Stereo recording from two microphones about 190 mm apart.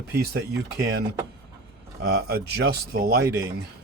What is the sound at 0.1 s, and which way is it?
Speech, 55° right (ahead or behind).